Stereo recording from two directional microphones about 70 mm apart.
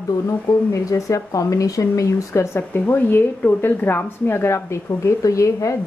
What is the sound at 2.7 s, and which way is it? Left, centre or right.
A woman's voice, left.